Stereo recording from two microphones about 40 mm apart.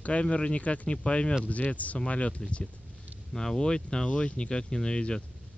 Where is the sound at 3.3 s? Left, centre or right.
Centre.